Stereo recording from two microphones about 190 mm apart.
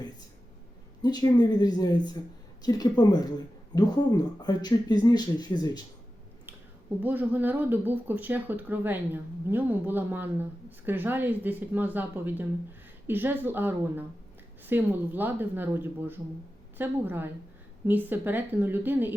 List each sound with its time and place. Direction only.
1.0 s speech: 20° left (ahead or behind)
7.0 s speech: 10° right (ahead or behind)